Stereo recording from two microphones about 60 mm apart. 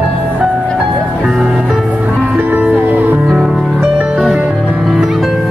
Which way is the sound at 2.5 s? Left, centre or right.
Right.